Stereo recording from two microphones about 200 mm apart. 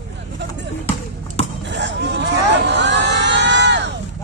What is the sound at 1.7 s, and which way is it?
Speech, 60° right (ahead or behind).